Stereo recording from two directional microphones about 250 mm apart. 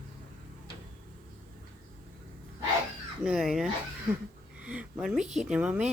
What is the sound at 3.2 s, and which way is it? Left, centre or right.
Speech, centre.